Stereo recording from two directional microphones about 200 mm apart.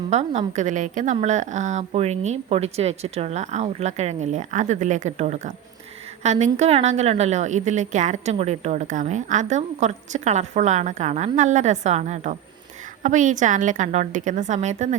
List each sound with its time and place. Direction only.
0.1 s a woman's voice: 35° right (ahead or behind)